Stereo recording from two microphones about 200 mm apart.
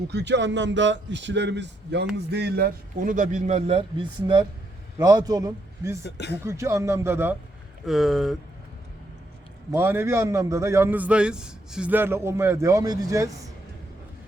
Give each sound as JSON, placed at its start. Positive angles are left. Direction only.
{"t": 0.1, "sound": "a man's voice", "side_deg": -60}
{"t": 6.0, "sound": "speech", "side_deg": 55}
{"t": 6.4, "sound": "a man's voice", "side_deg": -15}
{"t": 9.7, "sound": "a man's voice", "side_deg": -10}